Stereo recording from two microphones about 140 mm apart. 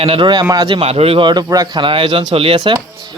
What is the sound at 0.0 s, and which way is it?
Speech, 40° right (ahead or behind).